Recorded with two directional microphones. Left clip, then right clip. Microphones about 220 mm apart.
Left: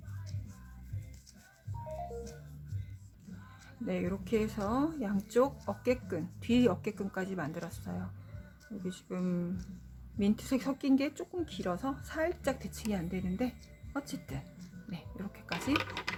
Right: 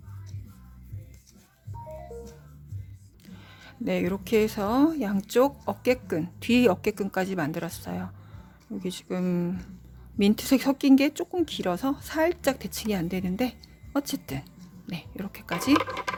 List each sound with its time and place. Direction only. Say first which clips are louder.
3.8 s speech: right 8 dB; 50° right (ahead or behind)